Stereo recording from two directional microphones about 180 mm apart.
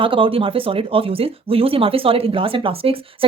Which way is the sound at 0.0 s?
30° right (ahead or behind).